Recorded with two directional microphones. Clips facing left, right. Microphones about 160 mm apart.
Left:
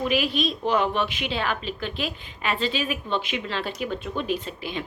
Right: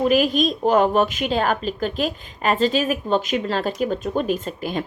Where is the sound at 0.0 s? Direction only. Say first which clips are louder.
Right 6 dB; 45° right (ahead or behind).